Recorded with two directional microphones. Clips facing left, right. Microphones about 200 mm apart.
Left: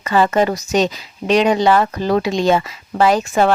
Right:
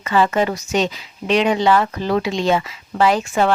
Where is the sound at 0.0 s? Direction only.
40° left (ahead or behind).